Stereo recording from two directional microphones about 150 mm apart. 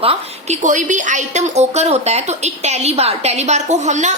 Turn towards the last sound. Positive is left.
turn(degrees=-50)  # may be behind; listen again after turning